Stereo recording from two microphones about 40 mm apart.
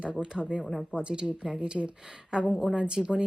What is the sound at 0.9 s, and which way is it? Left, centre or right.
Speech, right.